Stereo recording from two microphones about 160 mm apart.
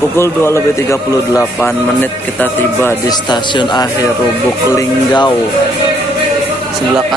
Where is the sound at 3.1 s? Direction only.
30° left (ahead or behind).